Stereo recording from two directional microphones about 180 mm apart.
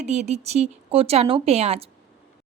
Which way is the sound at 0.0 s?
40° right (ahead or behind).